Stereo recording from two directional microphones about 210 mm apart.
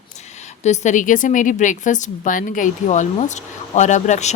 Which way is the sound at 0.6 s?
35° left (ahead or behind).